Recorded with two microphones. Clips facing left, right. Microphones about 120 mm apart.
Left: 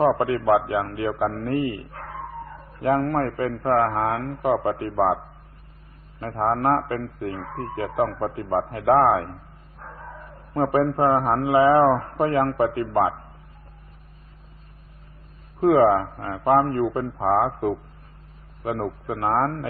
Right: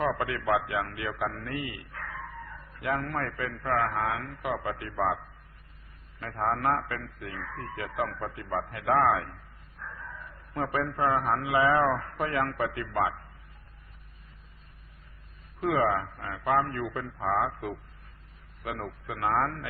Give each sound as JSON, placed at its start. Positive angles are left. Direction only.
{"t": 0.0, "sound": "a man's voice", "side_deg": 35}
{"t": 15.6, "sound": "a man's voice", "side_deg": 35}